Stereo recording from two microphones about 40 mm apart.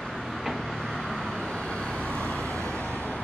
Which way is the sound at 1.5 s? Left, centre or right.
Centre.